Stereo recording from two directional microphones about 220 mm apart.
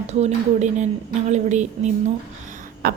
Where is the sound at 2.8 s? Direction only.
45° right (ahead or behind).